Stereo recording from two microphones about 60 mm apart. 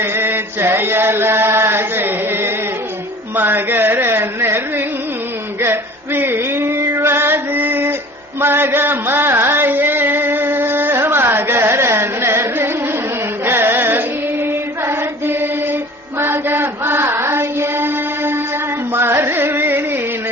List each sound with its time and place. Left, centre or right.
0.0 s chant: right
3.3 s a sound: right
5.5 s music: right
13.4 s carnatic music: right
14.8 s chant: right
16.2 s mantra: right
18.9 s music: right